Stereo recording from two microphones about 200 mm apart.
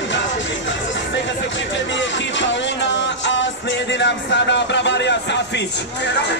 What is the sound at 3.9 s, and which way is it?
Speech, 60° left (ahead or behind).